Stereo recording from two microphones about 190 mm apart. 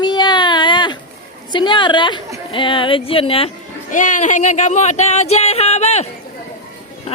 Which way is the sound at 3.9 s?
40° left (ahead or behind).